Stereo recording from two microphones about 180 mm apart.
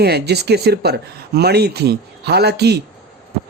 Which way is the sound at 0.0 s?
65° right (ahead or behind).